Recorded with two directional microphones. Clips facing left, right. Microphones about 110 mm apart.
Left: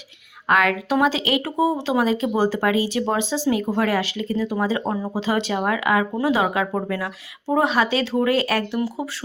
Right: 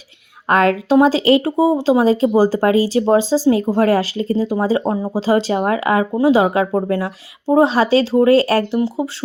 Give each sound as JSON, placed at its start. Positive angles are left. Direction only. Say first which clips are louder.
{"t": 0.4, "sound": "speech", "louder": "right 5 dB", "side_deg": -35}